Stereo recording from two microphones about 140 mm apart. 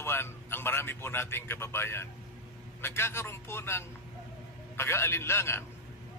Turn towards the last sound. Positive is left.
turn(degrees=20)  # may be behind; listen again after turning